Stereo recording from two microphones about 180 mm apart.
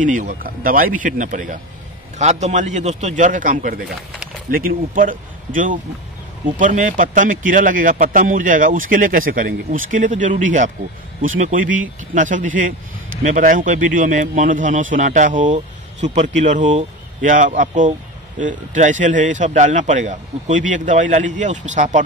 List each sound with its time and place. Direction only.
0.0 s a man's voice: 45° right (ahead or behind)